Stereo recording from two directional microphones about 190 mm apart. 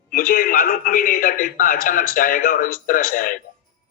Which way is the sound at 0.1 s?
50° left (ahead or behind).